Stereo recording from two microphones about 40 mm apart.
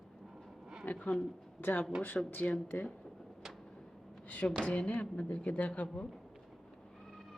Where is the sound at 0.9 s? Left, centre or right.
Left.